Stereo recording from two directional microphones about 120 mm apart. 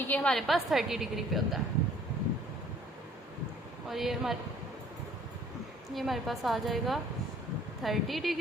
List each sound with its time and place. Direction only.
0.0 s a woman's voice: 15° left (ahead or behind)
0.3 s a woman's voice: centre (ahead or behind)
3.8 s a woman's voice: centre (ahead or behind)
5.9 s a woman's voice: centre (ahead or behind)